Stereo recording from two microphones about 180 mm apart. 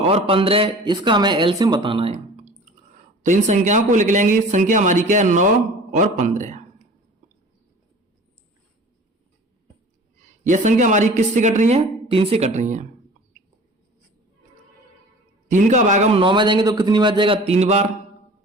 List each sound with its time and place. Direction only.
0.1 s speech: 30° right (ahead or behind)
10.4 s speech: 45° right (ahead or behind)
12.0 s speech: 30° right (ahead or behind)
15.4 s speech: 45° right (ahead or behind)
16.2 s speech: 25° right (ahead or behind)